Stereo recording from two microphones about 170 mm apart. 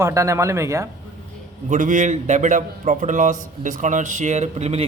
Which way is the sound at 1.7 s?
45° right (ahead or behind).